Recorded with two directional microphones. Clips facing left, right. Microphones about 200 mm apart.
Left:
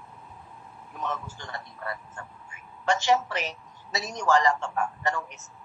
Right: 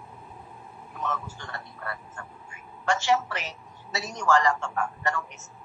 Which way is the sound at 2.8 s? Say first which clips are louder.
Left 1 dB; 20° left (ahead or behind).